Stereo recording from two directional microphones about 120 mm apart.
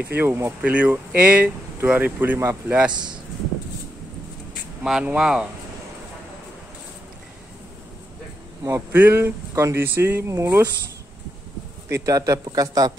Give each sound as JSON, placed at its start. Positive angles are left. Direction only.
{"t": 0.0, "sound": "speech", "side_deg": -20}
{"t": 4.8, "sound": "speech", "side_deg": -5}
{"t": 8.6, "sound": "speech", "side_deg": -20}
{"t": 11.9, "sound": "speech", "side_deg": -30}